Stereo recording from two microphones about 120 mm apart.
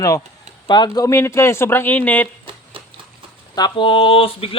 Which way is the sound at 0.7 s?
35° left (ahead or behind).